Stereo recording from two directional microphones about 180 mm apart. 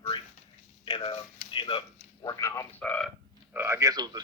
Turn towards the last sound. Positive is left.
turn(degrees=-20)  # may be behind; listen again after turning